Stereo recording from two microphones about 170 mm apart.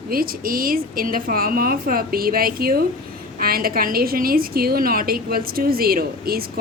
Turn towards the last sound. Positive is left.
turn(degrees=-60)  # may be behind; listen again after turning